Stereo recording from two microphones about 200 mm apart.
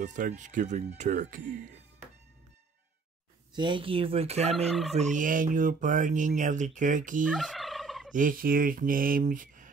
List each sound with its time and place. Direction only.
0.0 s fowl: 40° right (ahead or behind)
3.5 s speech: 25° right (ahead or behind)
4.6 s fowl: centre (ahead or behind)
4.9 s fowl: 40° right (ahead or behind)
7.2 s fowl: centre (ahead or behind)
8.1 s speech: 40° right (ahead or behind)